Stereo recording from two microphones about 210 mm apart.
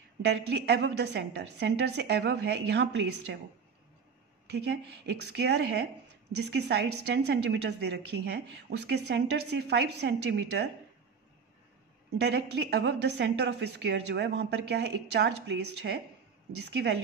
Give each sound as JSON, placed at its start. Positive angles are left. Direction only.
{"t": 0.2, "sound": "a woman's voice", "side_deg": -55}
{"t": 4.6, "sound": "a woman's voice", "side_deg": -55}
{"t": 12.2, "sound": "a woman's voice", "side_deg": -50}